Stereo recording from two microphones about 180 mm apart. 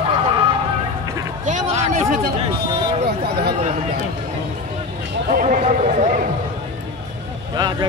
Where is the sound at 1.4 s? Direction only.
45° right (ahead or behind).